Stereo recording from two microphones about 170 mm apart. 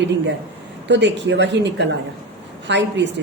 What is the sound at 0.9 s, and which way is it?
A woman's voice, 90° right.